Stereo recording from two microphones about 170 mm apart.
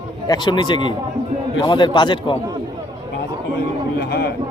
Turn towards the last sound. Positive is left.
turn(degrees=65)  # may be behind; listen again after turning